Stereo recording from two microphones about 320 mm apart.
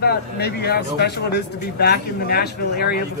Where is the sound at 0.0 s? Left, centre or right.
Left.